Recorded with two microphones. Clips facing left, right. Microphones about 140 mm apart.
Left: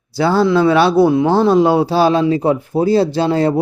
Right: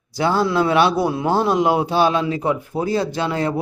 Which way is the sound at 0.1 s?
30° left (ahead or behind).